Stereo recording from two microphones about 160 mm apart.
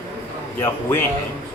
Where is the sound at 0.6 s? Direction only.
15° left (ahead or behind).